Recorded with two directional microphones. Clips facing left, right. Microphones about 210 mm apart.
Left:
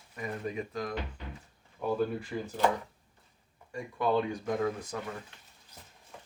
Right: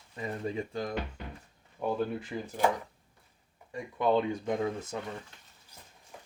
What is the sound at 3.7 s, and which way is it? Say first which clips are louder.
Speech: right 2 dB; 20° right (ahead or behind).